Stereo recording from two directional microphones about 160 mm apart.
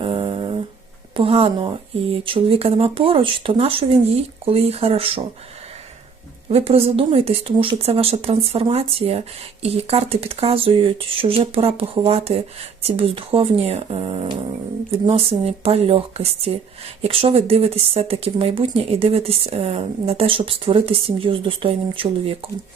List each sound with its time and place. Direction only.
0.0 s a sound: 35° right (ahead or behind)
1.1 s a woman's voice: 35° right (ahead or behind)
6.5 s a woman's voice: 40° right (ahead or behind)